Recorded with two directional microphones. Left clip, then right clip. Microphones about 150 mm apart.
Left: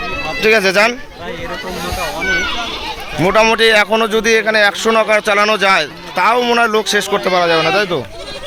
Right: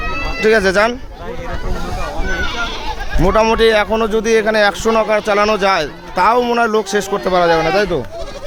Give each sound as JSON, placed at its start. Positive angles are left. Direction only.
{"t": 0.4, "sound": "speech", "side_deg": -30}
{"t": 3.2, "sound": "speech", "side_deg": -15}
{"t": 7.3, "sound": "speech", "side_deg": -30}